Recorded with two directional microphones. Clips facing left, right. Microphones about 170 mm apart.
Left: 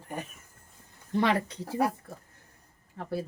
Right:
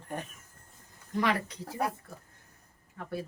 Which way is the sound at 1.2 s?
30° left (ahead or behind).